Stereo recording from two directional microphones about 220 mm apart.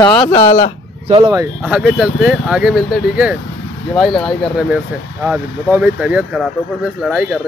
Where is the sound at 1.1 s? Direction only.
15° right (ahead or behind).